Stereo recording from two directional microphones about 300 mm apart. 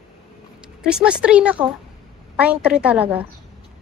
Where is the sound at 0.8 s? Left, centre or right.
Centre.